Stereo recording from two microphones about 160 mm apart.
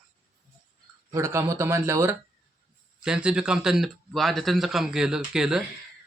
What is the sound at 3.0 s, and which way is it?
A man's voice, 5° right (ahead or behind).